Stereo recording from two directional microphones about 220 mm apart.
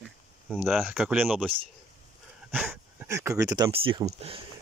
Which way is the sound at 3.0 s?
10° right (ahead or behind).